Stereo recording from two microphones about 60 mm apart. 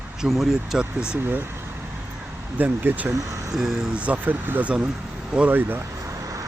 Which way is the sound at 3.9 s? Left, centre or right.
Right.